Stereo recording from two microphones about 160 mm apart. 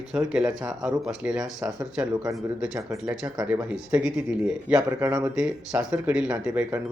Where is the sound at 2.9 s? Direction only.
20° right (ahead or behind).